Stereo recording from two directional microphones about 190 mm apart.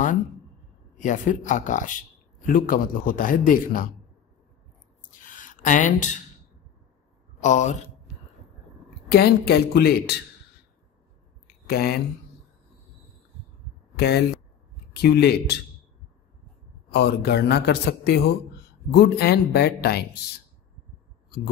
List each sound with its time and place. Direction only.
0.9 s speech: 40° left (ahead or behind)
5.2 s a sound: 45° left (ahead or behind)
7.3 s speech: 40° left (ahead or behind)
9.1 s speech: 55° left (ahead or behind)
11.6 s speech: 55° left (ahead or behind)
13.9 s speech: 60° left (ahead or behind)
16.9 s speech: 60° left (ahead or behind)